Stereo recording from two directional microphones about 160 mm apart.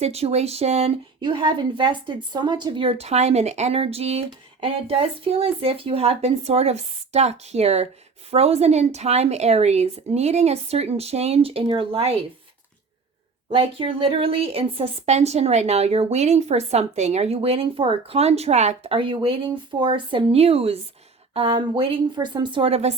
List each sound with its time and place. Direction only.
0.0 s speech: 40° right (ahead or behind)
13.5 s speech: 35° right (ahead or behind)